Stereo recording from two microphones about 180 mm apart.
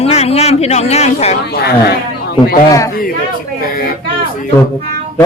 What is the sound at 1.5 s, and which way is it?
Speech, 60° left (ahead or behind).